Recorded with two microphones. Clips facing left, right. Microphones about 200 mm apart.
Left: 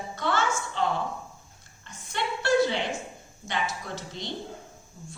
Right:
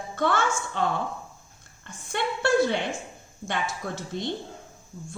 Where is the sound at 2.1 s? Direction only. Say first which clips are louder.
Right 3 dB; 55° right (ahead or behind).